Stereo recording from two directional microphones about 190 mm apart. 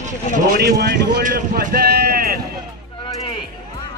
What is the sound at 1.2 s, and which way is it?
Speech, 45° right (ahead or behind).